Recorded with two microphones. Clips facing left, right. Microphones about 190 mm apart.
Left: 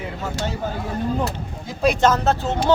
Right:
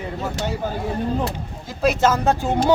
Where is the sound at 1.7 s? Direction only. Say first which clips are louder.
Left 1 dB; 5° right (ahead or behind).